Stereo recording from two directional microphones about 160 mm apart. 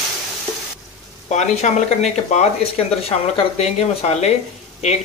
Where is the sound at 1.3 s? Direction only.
45° left (ahead or behind).